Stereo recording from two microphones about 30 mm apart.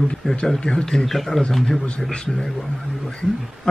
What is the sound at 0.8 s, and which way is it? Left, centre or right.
Speech, centre.